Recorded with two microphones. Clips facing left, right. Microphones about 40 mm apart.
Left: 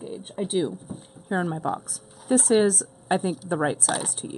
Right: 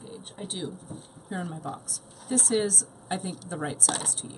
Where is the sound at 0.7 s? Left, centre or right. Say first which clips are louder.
Left 5 dB; centre.